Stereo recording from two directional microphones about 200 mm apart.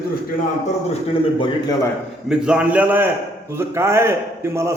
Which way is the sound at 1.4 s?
20° left (ahead or behind).